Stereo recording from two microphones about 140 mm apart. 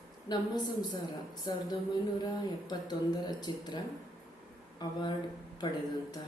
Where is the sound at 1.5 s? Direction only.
30° left (ahead or behind).